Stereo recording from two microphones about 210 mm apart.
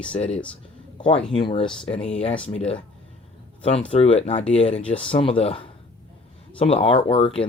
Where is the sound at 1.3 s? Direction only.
25° left (ahead or behind).